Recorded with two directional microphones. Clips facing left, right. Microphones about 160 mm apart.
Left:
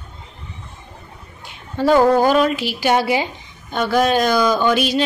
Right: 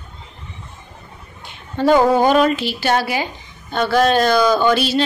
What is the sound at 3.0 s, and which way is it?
Speech, 20° left (ahead or behind).